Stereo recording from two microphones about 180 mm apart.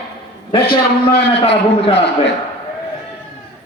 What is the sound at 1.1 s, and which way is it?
Speech, 30° left (ahead or behind).